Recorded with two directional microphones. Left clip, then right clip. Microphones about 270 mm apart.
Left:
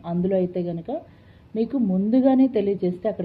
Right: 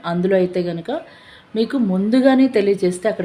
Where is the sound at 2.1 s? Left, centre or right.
Centre.